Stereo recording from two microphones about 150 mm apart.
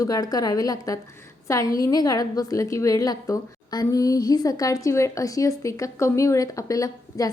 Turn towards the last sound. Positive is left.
turn(degrees=20)  # may be behind; listen again after turning